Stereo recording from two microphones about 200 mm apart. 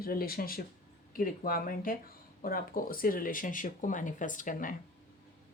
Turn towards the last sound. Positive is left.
turn(degrees=40)  # may be behind; listen again after turning